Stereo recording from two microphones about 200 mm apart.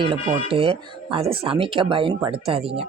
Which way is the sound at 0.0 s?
25° right (ahead or behind).